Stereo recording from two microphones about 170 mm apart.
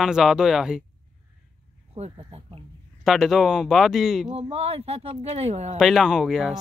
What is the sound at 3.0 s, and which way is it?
Speech, centre (ahead or behind).